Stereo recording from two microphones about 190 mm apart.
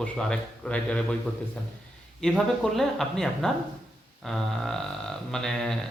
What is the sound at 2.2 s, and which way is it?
A man's voice, centre (ahead or behind).